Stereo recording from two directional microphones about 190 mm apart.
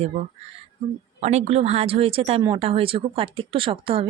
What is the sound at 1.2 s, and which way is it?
Speech, 35° right (ahead or behind).